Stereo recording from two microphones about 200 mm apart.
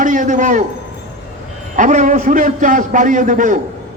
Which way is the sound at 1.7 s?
40° right (ahead or behind).